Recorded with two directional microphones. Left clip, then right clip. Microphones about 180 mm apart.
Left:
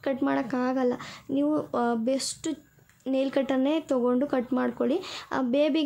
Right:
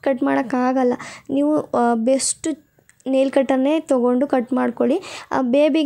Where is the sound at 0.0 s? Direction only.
35° right (ahead or behind).